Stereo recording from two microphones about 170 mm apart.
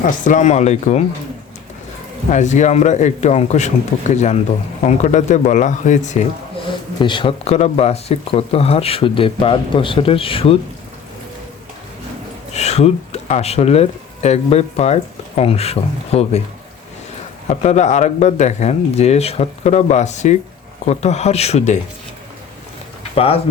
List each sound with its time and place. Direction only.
0.0 s speech: 45° left (ahead or behind)
2.3 s speech: 45° left (ahead or behind)
7.0 s speech: 30° left (ahead or behind)
12.5 s speech: 40° left (ahead or behind)
17.5 s speech: 40° left (ahead or behind)
23.1 s speech: 35° left (ahead or behind)